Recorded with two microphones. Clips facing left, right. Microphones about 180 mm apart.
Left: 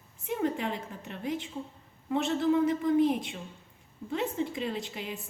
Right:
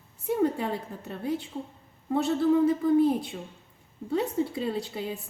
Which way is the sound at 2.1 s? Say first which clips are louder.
Right 3 dB; 35° right (ahead or behind).